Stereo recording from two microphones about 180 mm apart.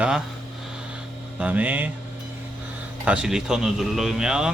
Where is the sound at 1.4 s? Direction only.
10° right (ahead or behind).